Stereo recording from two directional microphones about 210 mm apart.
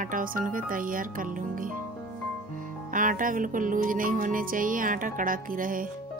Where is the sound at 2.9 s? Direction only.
40° right (ahead or behind).